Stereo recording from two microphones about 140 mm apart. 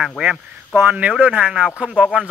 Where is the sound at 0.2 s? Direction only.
10° right (ahead or behind).